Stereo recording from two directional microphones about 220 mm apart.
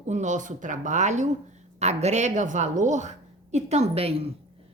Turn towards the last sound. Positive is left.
turn(degrees=-25)  # may be behind; listen again after turning